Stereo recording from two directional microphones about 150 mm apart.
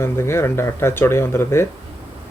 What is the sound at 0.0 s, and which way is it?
Speech, 15° left (ahead or behind).